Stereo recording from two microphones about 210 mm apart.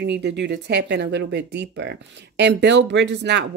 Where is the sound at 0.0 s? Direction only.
55° right (ahead or behind).